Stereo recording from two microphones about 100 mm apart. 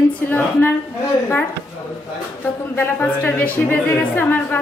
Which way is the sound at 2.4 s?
20° left (ahead or behind).